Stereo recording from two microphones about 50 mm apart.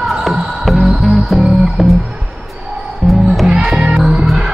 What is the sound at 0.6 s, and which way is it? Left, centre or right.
Music, centre.